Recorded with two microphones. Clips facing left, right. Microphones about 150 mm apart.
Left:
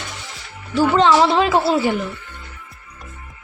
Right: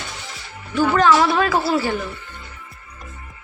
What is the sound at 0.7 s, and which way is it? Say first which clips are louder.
Speech: left 1 dB; 25° left (ahead or behind).